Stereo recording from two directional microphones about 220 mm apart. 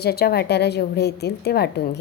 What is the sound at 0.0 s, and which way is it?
A woman's voice, 45° left (ahead or behind).